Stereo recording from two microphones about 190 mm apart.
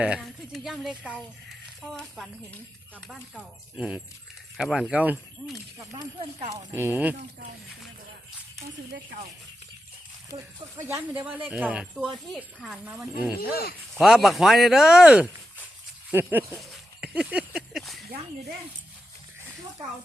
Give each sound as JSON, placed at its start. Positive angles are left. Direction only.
{"t": 0.0, "sound": "speech", "side_deg": -5}
{"t": 10.3, "sound": "speech", "side_deg": -20}
{"t": 13.4, "sound": "speech", "side_deg": 55}
{"t": 13.9, "sound": "speech", "side_deg": 0}
{"t": 16.6, "sound": "a sound", "side_deg": -5}